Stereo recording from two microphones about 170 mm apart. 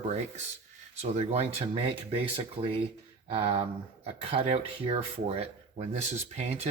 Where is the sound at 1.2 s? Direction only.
35° right (ahead or behind).